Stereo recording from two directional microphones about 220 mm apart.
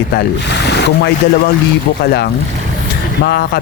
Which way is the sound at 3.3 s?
45° left (ahead or behind).